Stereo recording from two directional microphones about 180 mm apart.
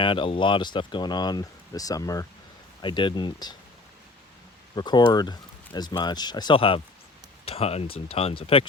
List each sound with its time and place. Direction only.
0.0 s speech: 30° left (ahead or behind)
4.7 s speech: 25° left (ahead or behind)